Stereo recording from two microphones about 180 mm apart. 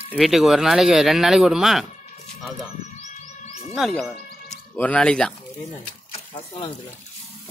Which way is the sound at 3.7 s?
Centre (ahead or behind).